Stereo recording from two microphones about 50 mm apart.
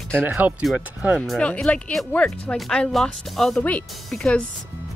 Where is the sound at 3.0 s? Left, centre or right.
Centre.